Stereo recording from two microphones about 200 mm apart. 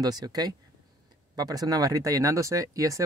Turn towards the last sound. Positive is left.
turn(degrees=-15)  # may be behind; listen again after turning